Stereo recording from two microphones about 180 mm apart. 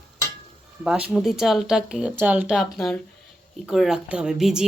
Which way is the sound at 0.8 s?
5° right (ahead or behind).